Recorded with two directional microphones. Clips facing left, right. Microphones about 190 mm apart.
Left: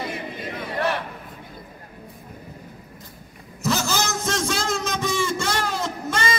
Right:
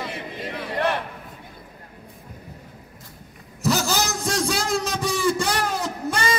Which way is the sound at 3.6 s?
35° right (ahead or behind).